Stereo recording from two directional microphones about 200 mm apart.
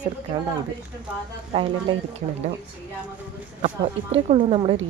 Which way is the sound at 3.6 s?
30° right (ahead or behind).